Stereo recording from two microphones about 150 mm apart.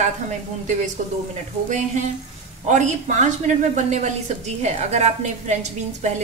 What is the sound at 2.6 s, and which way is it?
Speech, 55° right (ahead or behind).